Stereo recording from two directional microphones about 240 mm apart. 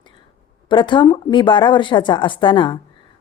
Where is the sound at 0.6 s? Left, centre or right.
Centre.